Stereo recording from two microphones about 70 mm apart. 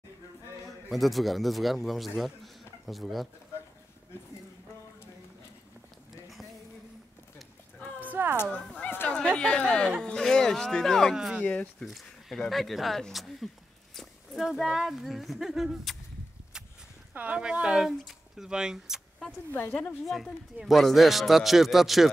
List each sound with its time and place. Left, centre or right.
0.7 s a man's voice: centre
8.0 s a sound: right
8.4 s a sound: left
9.1 s speech: centre
11.4 s speech: left
11.8 s speech: centre
17.1 s speech: centre
20.5 s speech: centre